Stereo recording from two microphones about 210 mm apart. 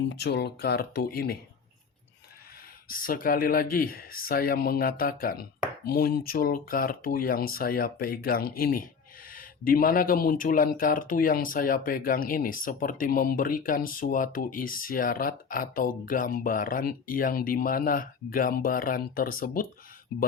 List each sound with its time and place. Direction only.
0.1 s speech: 55° left (ahead or behind)
2.9 s speech: 40° left (ahead or behind)